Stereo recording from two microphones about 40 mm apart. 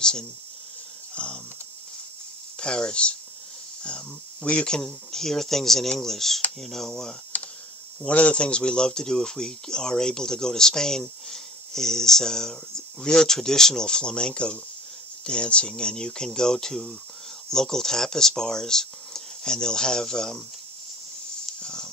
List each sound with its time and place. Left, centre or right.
0.0 s speech: centre
1.1 s speech: left
2.6 s speech: left
4.7 s speech: centre
8.1 s speech: left; by 20.4 s centre
21.5 s a sound: centre